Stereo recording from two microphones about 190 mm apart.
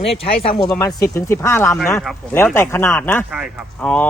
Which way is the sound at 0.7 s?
15° left (ahead or behind).